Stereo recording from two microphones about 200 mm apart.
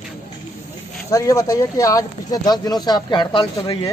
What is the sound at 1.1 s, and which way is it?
Speech, 15° left (ahead or behind).